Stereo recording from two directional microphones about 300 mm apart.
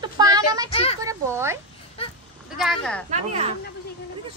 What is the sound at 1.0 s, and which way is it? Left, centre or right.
Speech, centre.